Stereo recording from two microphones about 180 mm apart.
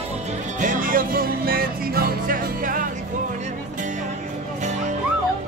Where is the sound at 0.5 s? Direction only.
45° right (ahead or behind).